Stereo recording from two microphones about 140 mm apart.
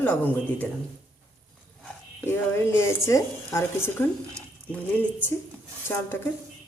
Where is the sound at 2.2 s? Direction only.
15° left (ahead or behind).